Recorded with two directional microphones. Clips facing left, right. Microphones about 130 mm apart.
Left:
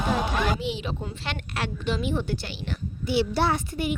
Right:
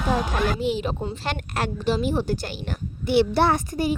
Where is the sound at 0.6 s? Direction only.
45° right (ahead or behind).